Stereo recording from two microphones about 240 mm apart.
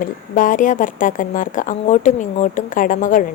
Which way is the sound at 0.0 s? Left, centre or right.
Left.